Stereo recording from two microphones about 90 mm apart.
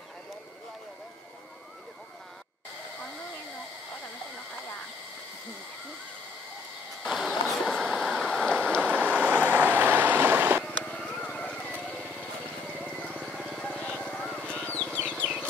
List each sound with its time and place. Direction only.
7.0 s vehicle: centre (ahead or behind)
8.9 s vehicle: 15° right (ahead or behind)
10.6 s vehicle: 5° left (ahead or behind)
13.4 s vehicle: 10° left (ahead or behind)
14.4 s a sound: 15° left (ahead or behind)